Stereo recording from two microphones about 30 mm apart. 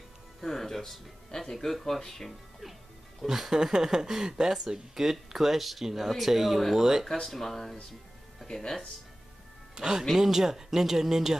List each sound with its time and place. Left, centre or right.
0.4 s speech: centre
3.3 s speech: centre
7.1 s speech: centre
8.4 s music: centre
9.8 s speech: right